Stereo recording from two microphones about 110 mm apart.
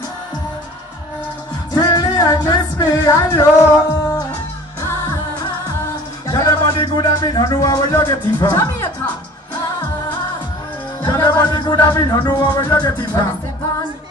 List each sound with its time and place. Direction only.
1.7 s music: 35° left (ahead or behind)
3.0 s music: 25° left (ahead or behind)
6.2 s speech: 35° left (ahead or behind)
8.5 s music: 25° left (ahead or behind)
11.1 s music: 40° left (ahead or behind)